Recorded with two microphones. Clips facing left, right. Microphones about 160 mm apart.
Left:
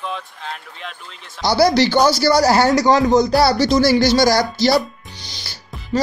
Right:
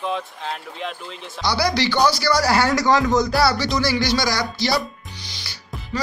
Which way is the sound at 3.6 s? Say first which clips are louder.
Left 7 dB; 40° left (ahead or behind).